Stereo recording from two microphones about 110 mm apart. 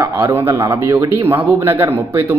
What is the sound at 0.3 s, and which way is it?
Speech, 20° right (ahead or behind).